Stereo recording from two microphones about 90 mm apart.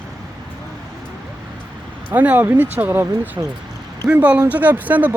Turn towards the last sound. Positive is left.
turn(degrees=-20)  # may be behind; listen again after turning